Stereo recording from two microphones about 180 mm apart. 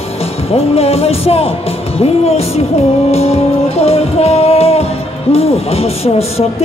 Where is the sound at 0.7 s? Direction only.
35° left (ahead or behind).